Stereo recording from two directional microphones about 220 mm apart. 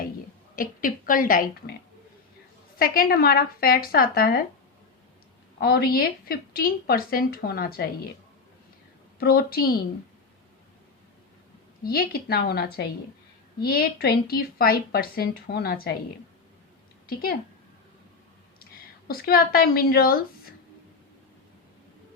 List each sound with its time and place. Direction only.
0.5 s speech: 40° left (ahead or behind)
2.7 s speech: 40° left (ahead or behind)
5.5 s a woman's voice: 45° left (ahead or behind)
9.1 s a woman's voice: 45° left (ahead or behind)
11.9 s a woman's voice: 45° left (ahead or behind)
17.1 s a woman's voice: 45° left (ahead or behind)
19.0 s a woman's voice: 45° left (ahead or behind)